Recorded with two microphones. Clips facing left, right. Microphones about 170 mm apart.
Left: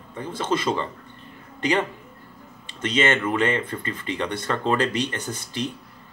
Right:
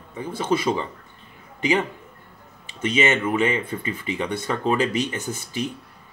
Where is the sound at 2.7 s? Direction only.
10° right (ahead or behind).